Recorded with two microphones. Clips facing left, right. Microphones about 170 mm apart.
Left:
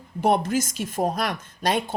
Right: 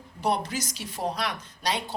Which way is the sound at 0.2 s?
50° left (ahead or behind).